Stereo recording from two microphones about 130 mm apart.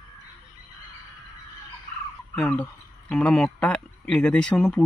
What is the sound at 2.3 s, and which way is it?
Speech, 10° left (ahead or behind).